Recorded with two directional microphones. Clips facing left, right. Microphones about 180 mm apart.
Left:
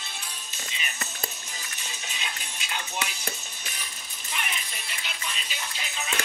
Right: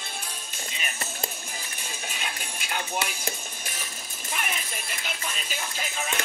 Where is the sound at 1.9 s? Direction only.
50° right (ahead or behind).